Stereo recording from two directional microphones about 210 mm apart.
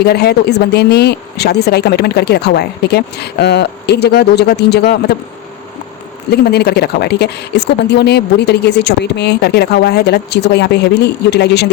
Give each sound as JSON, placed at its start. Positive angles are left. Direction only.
{"t": 0.0, "sound": "a woman's voice", "side_deg": 50}
{"t": 6.3, "sound": "a woman's voice", "side_deg": 50}